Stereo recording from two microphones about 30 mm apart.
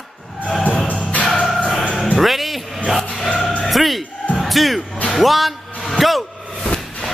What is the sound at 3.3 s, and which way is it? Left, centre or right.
Music, left.